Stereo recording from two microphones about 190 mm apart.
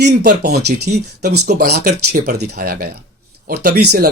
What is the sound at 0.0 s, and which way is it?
Speech, 60° right (ahead or behind).